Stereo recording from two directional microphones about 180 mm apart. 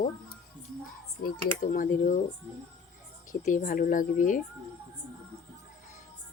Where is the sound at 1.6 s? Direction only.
50° left (ahead or behind).